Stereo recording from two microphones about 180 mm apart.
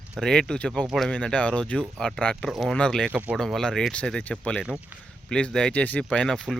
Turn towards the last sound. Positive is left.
turn(degrees=5)  # may be behind; listen again after turning